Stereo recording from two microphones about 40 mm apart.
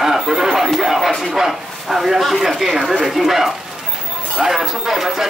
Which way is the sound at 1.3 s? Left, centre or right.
Centre.